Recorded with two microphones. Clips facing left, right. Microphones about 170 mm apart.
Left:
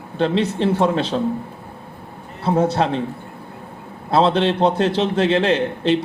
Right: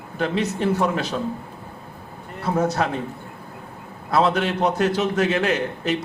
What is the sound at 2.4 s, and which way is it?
Speech, 30° left (ahead or behind).